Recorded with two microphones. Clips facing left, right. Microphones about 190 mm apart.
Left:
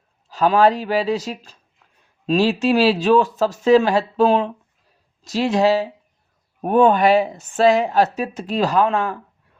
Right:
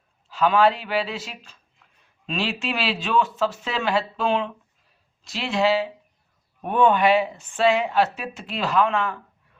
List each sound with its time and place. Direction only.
0.3 s speech: 40° left (ahead or behind)